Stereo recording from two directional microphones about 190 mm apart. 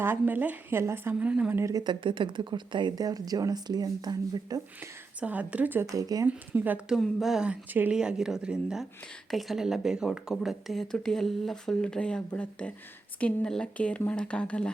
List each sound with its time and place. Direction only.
0.0 s a woman's voice: 10° right (ahead or behind)
5.2 s speech: 5° right (ahead or behind)
6.5 s speech: 5° right (ahead or behind)